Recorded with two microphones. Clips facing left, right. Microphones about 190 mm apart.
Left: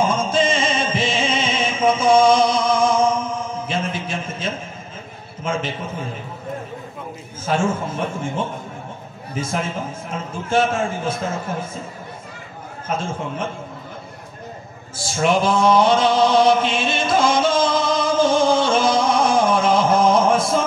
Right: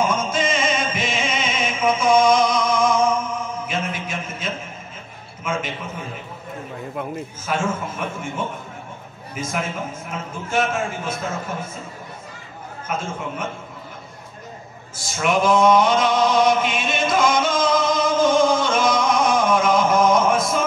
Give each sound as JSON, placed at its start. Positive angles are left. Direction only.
{"t": 0.0, "sound": "music", "side_deg": 30}
{"t": 3.6, "sound": "a sound", "side_deg": 30}
{"t": 7.4, "sound": "a man's voice", "side_deg": 30}
{"t": 9.3, "sound": "a man's voice", "side_deg": 30}
{"t": 12.8, "sound": "a man's voice", "side_deg": 30}
{"t": 15.0, "sound": "chant", "side_deg": 30}